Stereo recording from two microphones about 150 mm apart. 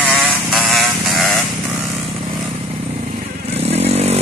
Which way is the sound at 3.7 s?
45° right (ahead or behind).